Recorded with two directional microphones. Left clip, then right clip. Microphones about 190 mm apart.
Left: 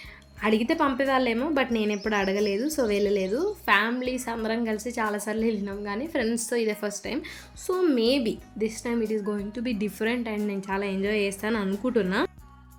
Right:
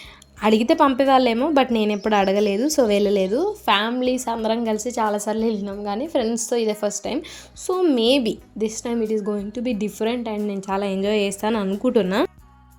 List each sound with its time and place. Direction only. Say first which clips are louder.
0.4 s a woman's voice: right 7 dB; 40° right (ahead or behind)
9.3 s speech: right 5 dB; 20° right (ahead or behind)